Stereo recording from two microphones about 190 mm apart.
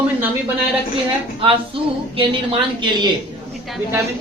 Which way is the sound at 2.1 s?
25° right (ahead or behind).